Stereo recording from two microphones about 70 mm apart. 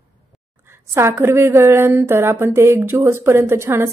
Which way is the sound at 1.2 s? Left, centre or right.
Right.